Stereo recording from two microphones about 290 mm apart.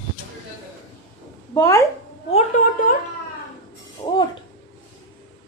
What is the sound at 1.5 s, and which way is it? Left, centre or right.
Speech, centre.